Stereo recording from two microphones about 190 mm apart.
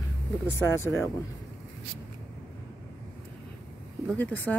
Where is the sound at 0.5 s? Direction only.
15° left (ahead or behind).